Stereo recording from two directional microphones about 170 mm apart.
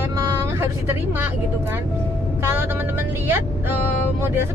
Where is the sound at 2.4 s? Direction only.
15° right (ahead or behind).